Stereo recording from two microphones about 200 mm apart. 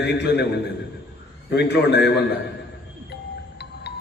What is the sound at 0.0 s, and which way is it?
A man's voice, 60° left (ahead or behind).